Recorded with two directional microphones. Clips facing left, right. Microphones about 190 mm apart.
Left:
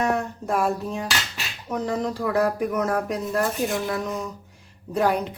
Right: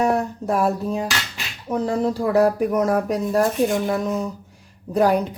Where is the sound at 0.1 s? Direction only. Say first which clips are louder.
Right 3 dB; 35° right (ahead or behind).